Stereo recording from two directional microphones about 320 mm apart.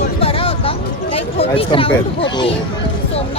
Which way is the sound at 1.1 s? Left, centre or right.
Centre.